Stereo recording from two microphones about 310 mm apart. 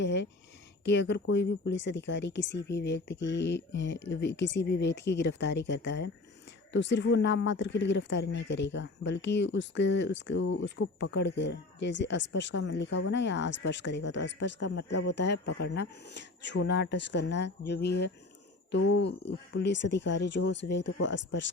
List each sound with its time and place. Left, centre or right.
0.0 s speech: left